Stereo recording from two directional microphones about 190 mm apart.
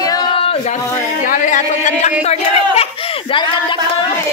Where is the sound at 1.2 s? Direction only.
45° left (ahead or behind); by 3.7 s 25° left (ahead or behind).